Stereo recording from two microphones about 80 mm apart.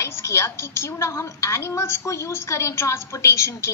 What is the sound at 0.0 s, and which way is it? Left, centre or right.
A woman's voice, left.